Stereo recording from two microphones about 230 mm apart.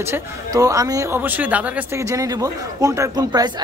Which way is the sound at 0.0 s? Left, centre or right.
Centre.